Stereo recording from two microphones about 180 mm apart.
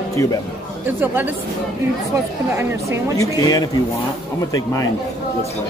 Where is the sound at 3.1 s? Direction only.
20° left (ahead or behind).